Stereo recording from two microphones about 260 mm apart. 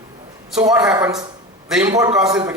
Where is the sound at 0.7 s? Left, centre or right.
Centre.